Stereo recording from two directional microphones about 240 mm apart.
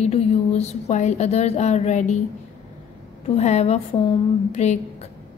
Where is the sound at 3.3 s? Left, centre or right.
Left.